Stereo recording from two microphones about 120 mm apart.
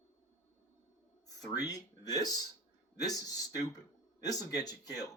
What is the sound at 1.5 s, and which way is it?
Speech, 30° left (ahead or behind).